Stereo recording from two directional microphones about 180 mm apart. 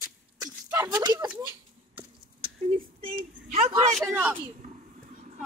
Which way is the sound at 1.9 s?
30° right (ahead or behind).